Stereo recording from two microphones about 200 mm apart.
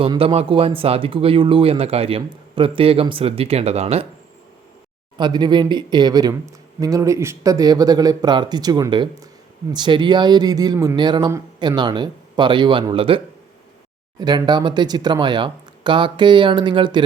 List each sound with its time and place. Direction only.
0.0 s speech: 25° right (ahead or behind)
5.1 s speech: 20° right (ahead or behind)